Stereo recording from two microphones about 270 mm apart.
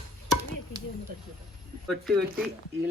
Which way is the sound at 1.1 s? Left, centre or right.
Right.